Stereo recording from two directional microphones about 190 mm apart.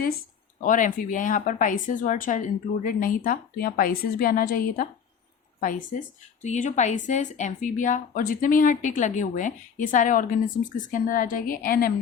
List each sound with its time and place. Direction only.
0.6 s speech: 45° left (ahead or behind)